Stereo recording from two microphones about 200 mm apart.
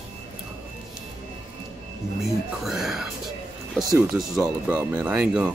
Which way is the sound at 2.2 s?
Centre (ahead or behind).